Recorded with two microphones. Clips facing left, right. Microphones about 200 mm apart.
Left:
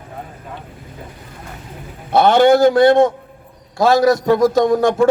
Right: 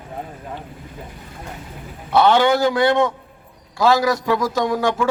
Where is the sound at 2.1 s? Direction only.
45° left (ahead or behind).